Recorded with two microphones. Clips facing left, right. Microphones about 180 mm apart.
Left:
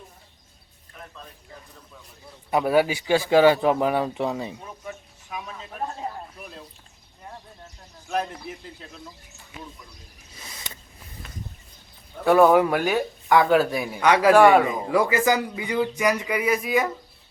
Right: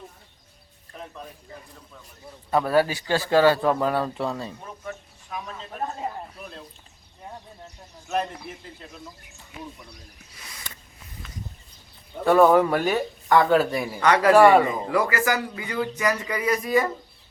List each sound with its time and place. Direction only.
2.5 s speech: 15° left (ahead or behind)
5.3 s speech: 5° left (ahead or behind)
8.0 s speech: centre (ahead or behind)
10.3 s a sound: 25° left (ahead or behind)
12.2 s speech: 5° left (ahead or behind)
14.3 s speech: centre (ahead or behind)
14.7 s speech: 10° left (ahead or behind)